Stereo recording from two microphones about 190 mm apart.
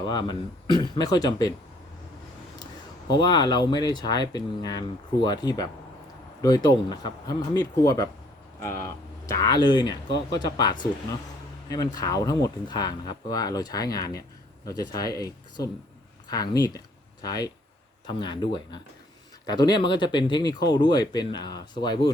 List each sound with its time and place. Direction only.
0.0 s speech: 25° left (ahead or behind)
3.2 s speech: 25° left (ahead or behind)